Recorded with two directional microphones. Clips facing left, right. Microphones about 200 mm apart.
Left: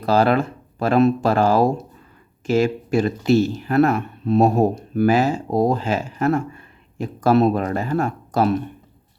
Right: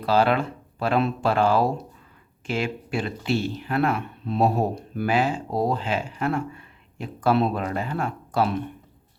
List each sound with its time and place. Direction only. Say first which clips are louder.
0.0 s speech: left 4 dB; 40° left (ahead or behind)